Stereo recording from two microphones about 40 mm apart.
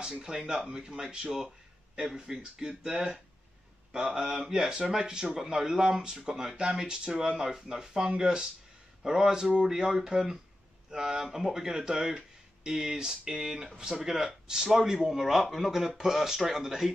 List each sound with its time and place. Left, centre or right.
0.2 s speech: centre